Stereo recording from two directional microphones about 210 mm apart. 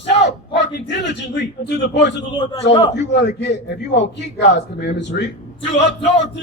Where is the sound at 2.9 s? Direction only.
55° left (ahead or behind).